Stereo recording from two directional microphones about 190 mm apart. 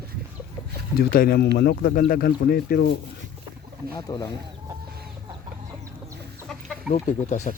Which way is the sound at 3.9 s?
25° left (ahead or behind).